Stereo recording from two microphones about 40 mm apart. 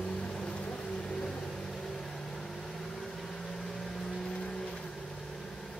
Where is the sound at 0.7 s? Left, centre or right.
Centre.